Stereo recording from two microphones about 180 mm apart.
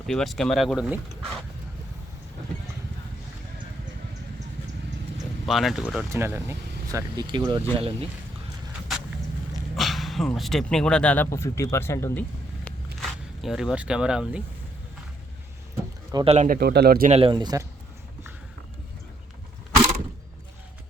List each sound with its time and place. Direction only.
0.1 s speech: centre (ahead or behind)
5.5 s speech: centre (ahead or behind)
6.1 s speech: 15° right (ahead or behind); by 7.9 s 30° right (ahead or behind)
9.7 s speech: centre (ahead or behind)
12.6 s a sound: centre (ahead or behind)
16.1 s speech: 35° right (ahead or behind)
16.5 s speech: 60° right (ahead or behind)
17.1 s speech: 30° right (ahead or behind)